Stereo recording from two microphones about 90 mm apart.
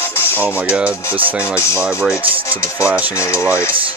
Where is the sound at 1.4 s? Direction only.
30° left (ahead or behind).